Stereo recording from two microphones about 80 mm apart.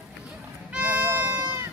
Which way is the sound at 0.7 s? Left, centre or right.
Centre.